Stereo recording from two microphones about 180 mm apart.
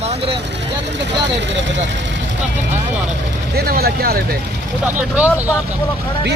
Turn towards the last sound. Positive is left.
turn(degrees=-10)  # may be behind; listen again after turning